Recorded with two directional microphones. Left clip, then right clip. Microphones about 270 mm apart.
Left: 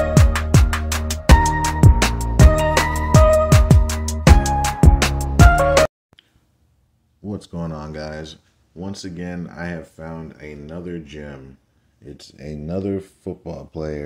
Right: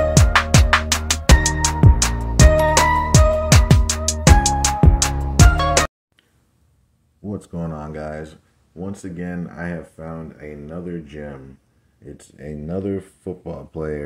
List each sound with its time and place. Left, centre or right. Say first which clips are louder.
0.1 s music: right 4 dB; centre
7.2 s speech: even; centre